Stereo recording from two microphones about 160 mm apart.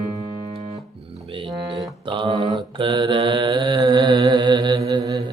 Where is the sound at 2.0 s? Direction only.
30° right (ahead or behind).